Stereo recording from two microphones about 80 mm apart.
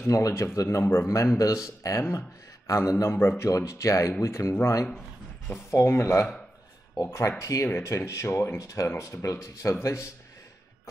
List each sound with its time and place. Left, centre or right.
0.0 s speech: left
3.4 s speech: left